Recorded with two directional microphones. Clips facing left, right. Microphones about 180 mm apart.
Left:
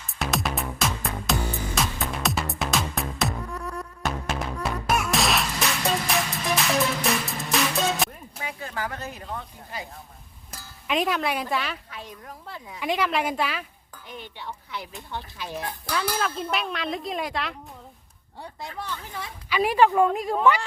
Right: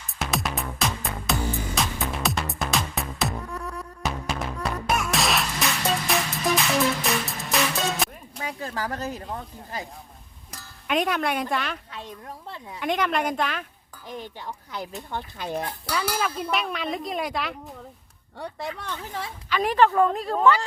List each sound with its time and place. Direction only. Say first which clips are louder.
0.2 s music: left 1 dB; centre (ahead or behind)
8.4 s a sound: right 2 dB; 35° right (ahead or behind)
10.5 s speech: right 1 dB; centre (ahead or behind)
12.8 s speech: even; 5° left (ahead or behind)
14.1 s speech: right 3 dB; 40° right (ahead or behind)
15.9 s speech: even; 5° right (ahead or behind)
19.5 s a woman's voice: left 1 dB; 10° left (ahead or behind)